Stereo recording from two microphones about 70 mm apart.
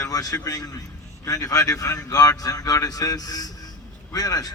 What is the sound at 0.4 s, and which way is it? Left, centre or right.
Speech, left.